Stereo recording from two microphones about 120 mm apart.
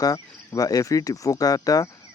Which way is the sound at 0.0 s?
30° left (ahead or behind).